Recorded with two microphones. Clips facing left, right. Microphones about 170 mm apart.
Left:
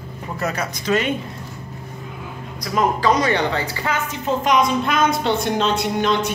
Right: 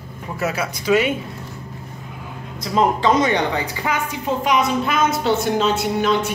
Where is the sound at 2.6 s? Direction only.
25° right (ahead or behind).